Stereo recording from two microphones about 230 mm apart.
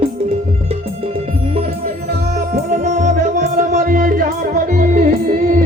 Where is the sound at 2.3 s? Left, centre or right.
Right.